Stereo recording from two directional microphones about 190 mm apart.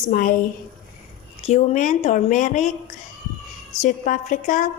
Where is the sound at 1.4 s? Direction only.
40° left (ahead or behind).